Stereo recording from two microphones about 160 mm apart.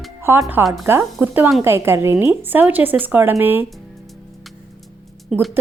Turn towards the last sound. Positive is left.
turn(degrees=-5)  # may be behind; listen again after turning